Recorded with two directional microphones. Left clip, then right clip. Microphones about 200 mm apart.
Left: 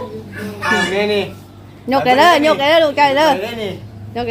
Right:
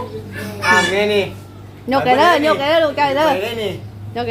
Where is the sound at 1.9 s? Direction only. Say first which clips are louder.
Left 2 dB; 10° left (ahead or behind).